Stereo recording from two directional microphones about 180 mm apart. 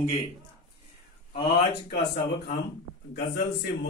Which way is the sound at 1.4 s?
60° left (ahead or behind).